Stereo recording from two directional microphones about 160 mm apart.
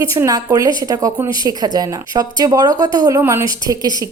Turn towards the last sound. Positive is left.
turn(degrees=-20)  # may be behind; listen again after turning